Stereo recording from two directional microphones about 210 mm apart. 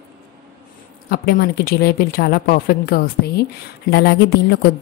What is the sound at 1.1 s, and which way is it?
A woman's voice, 45° left (ahead or behind).